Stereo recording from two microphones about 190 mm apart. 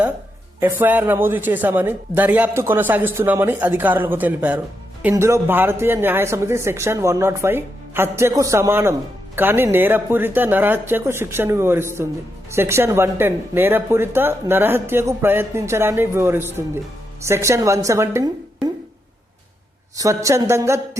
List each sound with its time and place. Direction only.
0.6 s speech: 10° right (ahead or behind)
20.0 s speech: 15° right (ahead or behind)